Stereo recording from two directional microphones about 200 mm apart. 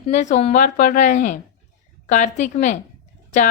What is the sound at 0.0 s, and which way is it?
Speech, 35° left (ahead or behind).